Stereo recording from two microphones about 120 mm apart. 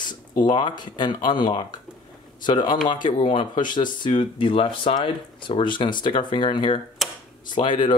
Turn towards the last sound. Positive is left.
turn(degrees=45)  # may be behind; listen again after turning